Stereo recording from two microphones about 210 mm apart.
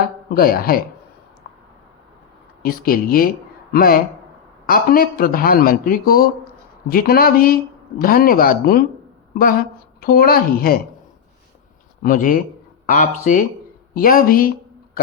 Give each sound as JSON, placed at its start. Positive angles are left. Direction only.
{"t": 0.3, "sound": "a man's voice", "side_deg": 45}
{"t": 2.6, "sound": "a man's voice", "side_deg": 45}
{"t": 12.0, "sound": "a man's voice", "side_deg": 40}